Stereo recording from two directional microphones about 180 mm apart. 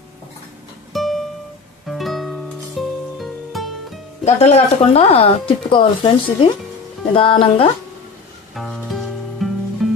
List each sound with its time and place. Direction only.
0.9 s music: centre (ahead or behind)
4.2 s speech: 40° left (ahead or behind)
8.5 s music: centre (ahead or behind)